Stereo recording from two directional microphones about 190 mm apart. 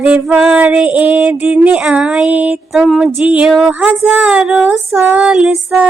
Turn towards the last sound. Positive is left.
turn(degrees=-5)  # may be behind; listen again after turning